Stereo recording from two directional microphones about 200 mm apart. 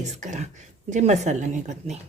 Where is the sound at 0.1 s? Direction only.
35° right (ahead or behind).